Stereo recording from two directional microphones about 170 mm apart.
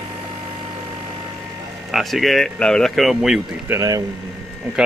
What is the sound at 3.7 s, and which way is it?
Speech, 20° right (ahead or behind).